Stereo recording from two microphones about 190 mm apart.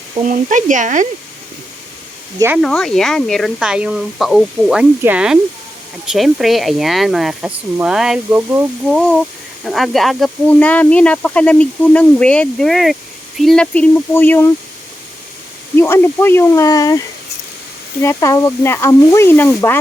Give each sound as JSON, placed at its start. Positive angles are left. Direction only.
{"t": 0.3, "sound": "speech", "side_deg": -40}
{"t": 2.6, "sound": "speech", "side_deg": 5}
{"t": 8.9, "sound": "speech", "side_deg": 5}
{"t": 15.7, "sound": "speech", "side_deg": 10}